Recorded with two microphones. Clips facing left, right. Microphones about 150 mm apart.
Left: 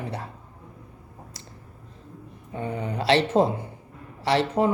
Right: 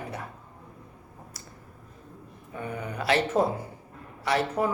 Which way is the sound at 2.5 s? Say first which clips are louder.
Left 4 dB; 25° left (ahead or behind).